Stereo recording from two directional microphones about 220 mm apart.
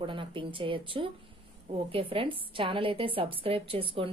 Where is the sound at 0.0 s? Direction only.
25° right (ahead or behind).